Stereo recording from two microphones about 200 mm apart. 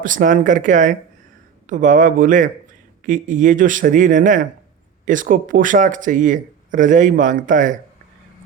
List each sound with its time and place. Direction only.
0.0 s speech: 40° right (ahead or behind)